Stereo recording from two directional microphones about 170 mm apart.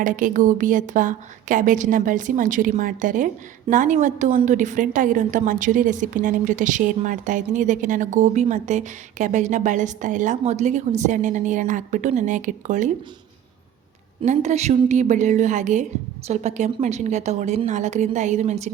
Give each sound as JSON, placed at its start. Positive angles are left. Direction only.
{"t": 0.0, "sound": "a woman's voice", "side_deg": -50}
{"t": 14.3, "sound": "a woman's voice", "side_deg": -40}